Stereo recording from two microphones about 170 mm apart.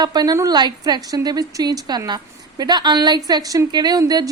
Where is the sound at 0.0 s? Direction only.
25° right (ahead or behind).